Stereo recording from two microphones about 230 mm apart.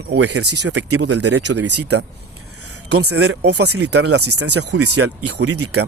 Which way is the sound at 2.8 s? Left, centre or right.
Right.